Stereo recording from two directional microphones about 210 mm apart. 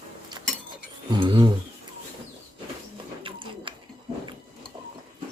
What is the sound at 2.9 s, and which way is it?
Printer, 25° right (ahead or behind).